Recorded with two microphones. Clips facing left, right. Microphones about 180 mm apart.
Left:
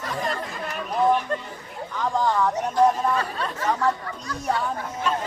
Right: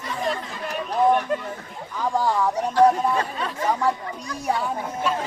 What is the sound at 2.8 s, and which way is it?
Chatter, 65° right (ahead or behind).